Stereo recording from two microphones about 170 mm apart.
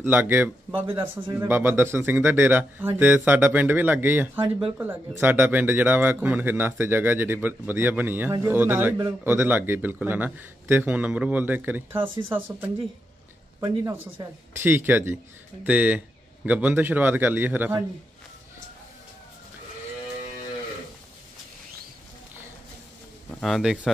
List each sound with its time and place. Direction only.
0.0 s speech: 10° right (ahead or behind)
4.4 s speech: 30° right (ahead or behind)
5.2 s speech: 10° right (ahead or behind)
12.0 s speech: 30° right (ahead or behind)
12.3 s speech: 10° right (ahead or behind)
13.6 s speech: 25° right (ahead or behind)
14.6 s speech: 10° right (ahead or behind)
23.3 s a man's voice: centre (ahead or behind)